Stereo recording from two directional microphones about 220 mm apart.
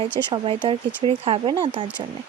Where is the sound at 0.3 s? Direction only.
20° right (ahead or behind).